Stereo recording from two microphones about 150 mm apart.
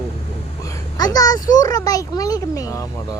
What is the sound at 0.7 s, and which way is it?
A child's voice, 25° left (ahead or behind).